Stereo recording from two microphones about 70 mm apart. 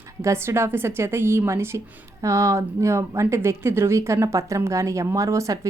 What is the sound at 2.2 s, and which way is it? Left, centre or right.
A woman's voice, right.